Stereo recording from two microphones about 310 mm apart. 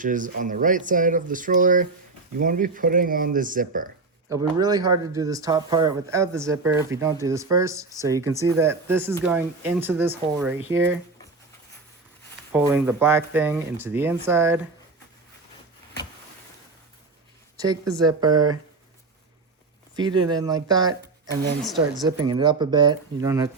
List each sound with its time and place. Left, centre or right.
0.0 s speech: right
4.3 s speech: centre
12.5 s speech: centre
17.6 s speech: centre
20.0 s speech: centre
22.0 s speech: centre